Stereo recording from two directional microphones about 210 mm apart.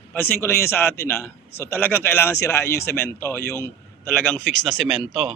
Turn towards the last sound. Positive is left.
turn(degrees=-5)  # may be behind; listen again after turning